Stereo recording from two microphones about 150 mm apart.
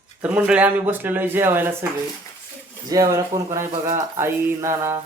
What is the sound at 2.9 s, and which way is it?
Speech, 20° right (ahead or behind).